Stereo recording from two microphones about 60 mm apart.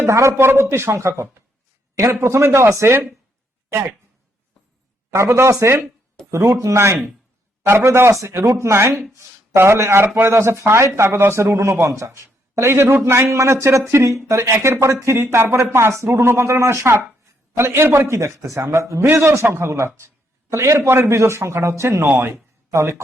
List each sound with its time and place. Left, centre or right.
0.0 s speech: right
5.1 s speech: right
22.7 s speech: right